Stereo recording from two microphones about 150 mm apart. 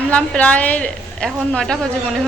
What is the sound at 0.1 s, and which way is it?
A woman's voice, 10° left (ahead or behind).